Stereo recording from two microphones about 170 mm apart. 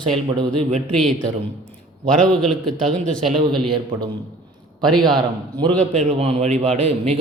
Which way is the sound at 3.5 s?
25° right (ahead or behind).